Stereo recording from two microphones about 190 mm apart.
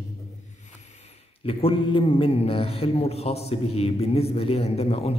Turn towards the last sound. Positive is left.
turn(degrees=30)  # may be behind; listen again after turning